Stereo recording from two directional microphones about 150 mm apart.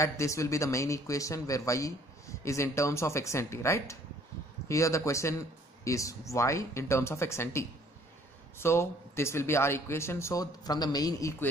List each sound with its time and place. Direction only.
0.0 s speech: 20° left (ahead or behind)